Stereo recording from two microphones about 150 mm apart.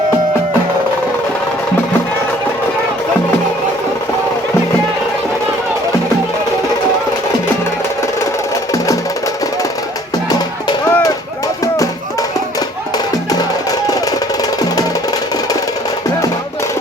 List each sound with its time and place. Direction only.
10.2 s music: 25° left (ahead or behind)